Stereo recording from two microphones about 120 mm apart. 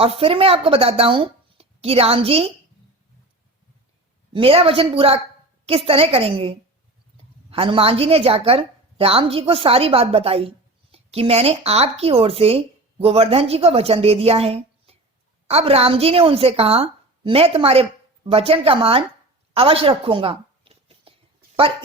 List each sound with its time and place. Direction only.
0.0 s a woman's voice: 50° right (ahead or behind)
4.3 s a woman's voice: 50° right (ahead or behind)
19.5 s a sound: 50° right (ahead or behind)